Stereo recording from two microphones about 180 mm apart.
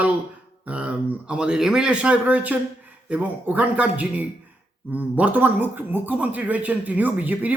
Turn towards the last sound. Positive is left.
turn(degrees=-10)  # may be behind; listen again after turning